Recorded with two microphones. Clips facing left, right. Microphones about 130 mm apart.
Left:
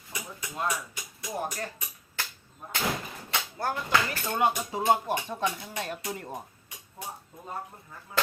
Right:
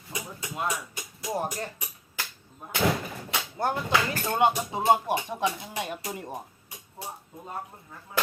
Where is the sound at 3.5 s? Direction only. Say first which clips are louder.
Right 2 dB; 25° right (ahead or behind).